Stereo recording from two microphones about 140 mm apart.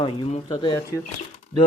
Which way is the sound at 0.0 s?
40° left (ahead or behind).